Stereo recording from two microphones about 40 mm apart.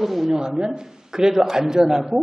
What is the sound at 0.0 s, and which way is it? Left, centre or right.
Speech, centre.